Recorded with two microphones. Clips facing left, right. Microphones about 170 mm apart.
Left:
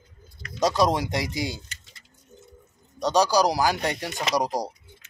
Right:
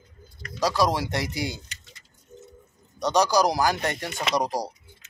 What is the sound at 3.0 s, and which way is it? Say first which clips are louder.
Speech: even; 15° left (ahead or behind).